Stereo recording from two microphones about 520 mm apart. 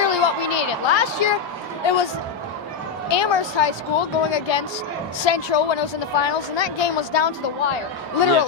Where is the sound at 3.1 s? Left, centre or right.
Left.